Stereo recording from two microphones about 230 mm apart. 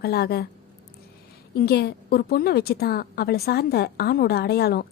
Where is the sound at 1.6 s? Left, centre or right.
Left.